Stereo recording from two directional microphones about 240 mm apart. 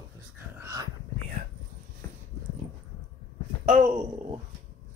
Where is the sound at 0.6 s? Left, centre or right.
Centre.